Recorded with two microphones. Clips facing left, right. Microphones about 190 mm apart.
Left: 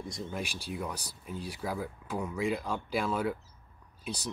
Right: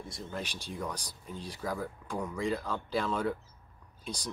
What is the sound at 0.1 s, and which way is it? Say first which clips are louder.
Speech: even; 10° left (ahead or behind).